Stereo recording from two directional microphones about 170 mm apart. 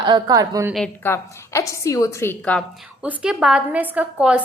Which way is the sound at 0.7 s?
10° left (ahead or behind).